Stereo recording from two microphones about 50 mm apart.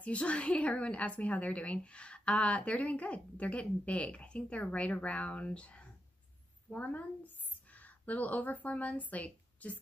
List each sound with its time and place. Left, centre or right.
0.0 s a woman's voice: left
6.7 s a woman's voice: left